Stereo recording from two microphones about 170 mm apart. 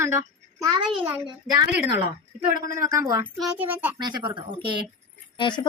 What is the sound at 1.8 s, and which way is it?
A child's voice, 10° right (ahead or behind).